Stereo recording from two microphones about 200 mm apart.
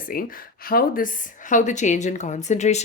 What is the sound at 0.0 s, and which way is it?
A woman's voice, 45° left (ahead or behind).